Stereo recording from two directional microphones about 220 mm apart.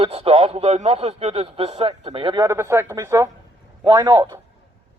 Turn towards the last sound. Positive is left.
turn(degrees=-15)  # may be behind; listen again after turning